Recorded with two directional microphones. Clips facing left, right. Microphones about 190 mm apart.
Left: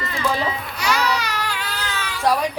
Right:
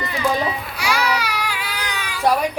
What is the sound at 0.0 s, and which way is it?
Baby cry, 10° right (ahead or behind).